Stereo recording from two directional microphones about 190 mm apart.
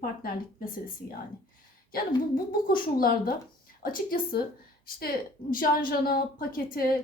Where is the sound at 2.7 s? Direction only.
50° left (ahead or behind).